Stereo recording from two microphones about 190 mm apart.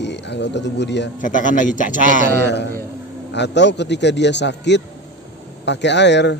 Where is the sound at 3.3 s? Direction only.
65° left (ahead or behind).